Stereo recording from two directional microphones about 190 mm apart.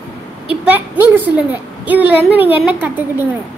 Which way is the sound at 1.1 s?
10° right (ahead or behind).